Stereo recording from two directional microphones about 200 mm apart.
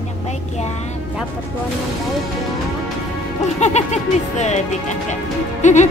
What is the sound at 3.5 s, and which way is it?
Speech, 35° left (ahead or behind).